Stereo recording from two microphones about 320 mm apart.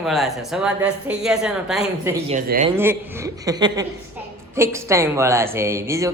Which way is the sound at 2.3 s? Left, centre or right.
Right.